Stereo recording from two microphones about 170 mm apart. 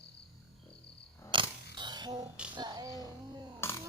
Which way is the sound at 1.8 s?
25° right (ahead or behind).